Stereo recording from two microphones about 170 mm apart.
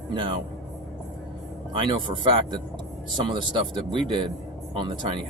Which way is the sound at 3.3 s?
25° right (ahead or behind).